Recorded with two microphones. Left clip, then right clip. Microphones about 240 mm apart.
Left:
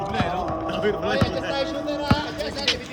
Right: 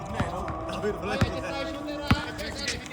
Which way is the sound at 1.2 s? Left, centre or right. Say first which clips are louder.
Left 6 dB; left.